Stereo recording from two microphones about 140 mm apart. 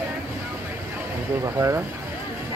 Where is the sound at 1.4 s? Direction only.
20° right (ahead or behind).